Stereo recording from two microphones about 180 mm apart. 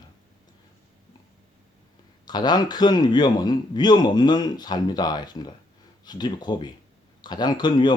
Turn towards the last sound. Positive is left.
turn(degrees=25)  # may be behind; listen again after turning